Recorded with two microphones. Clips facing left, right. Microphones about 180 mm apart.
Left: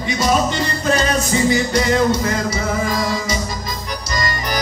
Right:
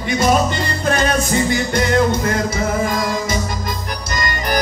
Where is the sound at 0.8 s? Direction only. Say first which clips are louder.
Right 1 dB; 55° right (ahead or behind).